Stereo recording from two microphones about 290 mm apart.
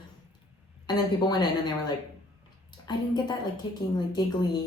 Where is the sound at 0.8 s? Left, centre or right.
Centre.